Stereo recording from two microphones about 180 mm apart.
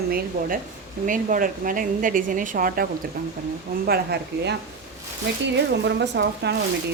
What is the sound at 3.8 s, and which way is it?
A woman's voice, 65° right (ahead or behind).